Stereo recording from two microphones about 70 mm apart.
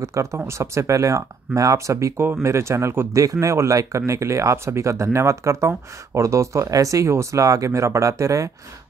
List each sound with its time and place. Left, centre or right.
0.0 s speech: right
3.1 s speech: right